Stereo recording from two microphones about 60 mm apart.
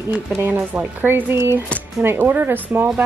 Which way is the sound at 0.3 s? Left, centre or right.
Right.